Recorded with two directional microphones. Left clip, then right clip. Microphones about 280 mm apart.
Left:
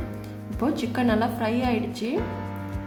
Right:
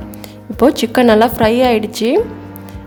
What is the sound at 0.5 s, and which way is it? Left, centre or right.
A woman's voice, right.